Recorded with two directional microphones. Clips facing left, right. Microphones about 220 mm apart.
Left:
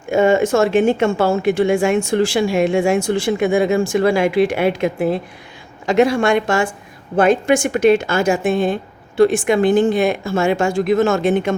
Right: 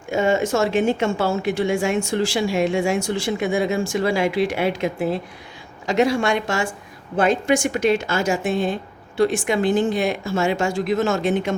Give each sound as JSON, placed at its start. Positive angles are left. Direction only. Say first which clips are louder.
{"t": 0.1, "sound": "speech", "louder": "left 5 dB", "side_deg": 55}